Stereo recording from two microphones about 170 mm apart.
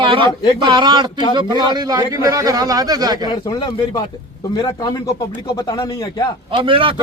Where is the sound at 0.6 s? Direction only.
25° right (ahead or behind).